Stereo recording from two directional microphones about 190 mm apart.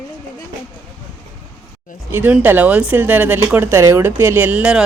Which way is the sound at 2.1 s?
10° right (ahead or behind).